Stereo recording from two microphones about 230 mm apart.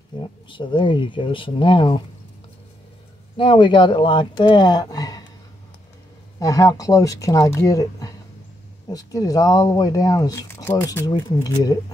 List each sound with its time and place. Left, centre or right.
0.5 s speech: left
3.3 s speech: left
6.4 s speech: centre